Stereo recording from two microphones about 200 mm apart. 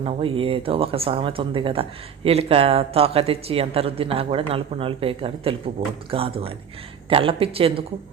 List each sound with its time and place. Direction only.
0.0 s speech: 30° right (ahead or behind)